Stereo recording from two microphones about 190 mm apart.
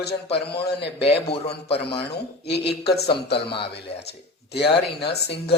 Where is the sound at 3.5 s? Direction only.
25° left (ahead or behind).